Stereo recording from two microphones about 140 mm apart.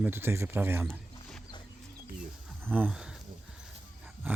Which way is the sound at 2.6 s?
10° right (ahead or behind).